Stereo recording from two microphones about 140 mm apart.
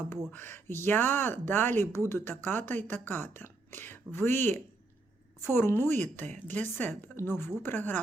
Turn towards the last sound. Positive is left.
turn(degrees=15)  # may be behind; listen again after turning